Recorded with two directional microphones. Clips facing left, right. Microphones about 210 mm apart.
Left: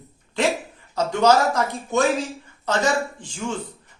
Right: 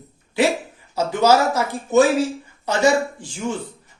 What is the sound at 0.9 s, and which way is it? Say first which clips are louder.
Speech: right 1 dB; 5° right (ahead or behind).